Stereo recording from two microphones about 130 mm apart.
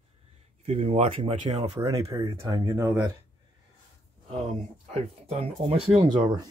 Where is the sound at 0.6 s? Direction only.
55° right (ahead or behind).